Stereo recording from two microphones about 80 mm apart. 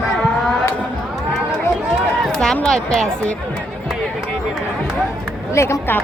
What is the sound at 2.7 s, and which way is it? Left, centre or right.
Speech, centre.